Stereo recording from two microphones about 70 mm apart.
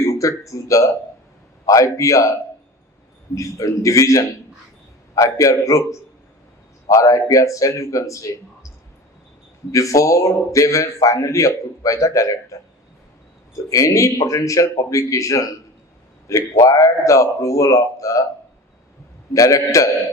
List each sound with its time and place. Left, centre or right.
0.0 s a man's voice: left
3.3 s a man's voice: left
9.7 s a man's voice: left
19.3 s a man's voice: left